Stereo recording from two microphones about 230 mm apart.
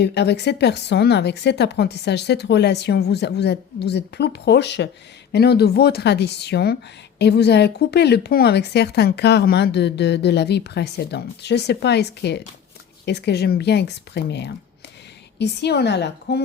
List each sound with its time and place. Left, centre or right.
0.0 s speech: left